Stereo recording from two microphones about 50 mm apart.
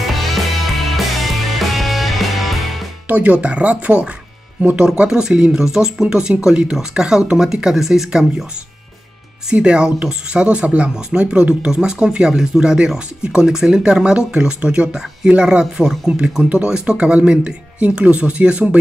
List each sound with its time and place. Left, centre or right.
0.0 s music: centre
3.1 s speech: right
4.8 s speech: centre
9.5 s speech: centre
16.4 s speech: right